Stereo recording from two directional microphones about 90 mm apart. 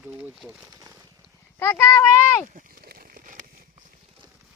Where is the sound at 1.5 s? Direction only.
25° left (ahead or behind).